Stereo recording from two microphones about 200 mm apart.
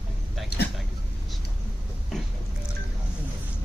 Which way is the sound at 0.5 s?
55° left (ahead or behind).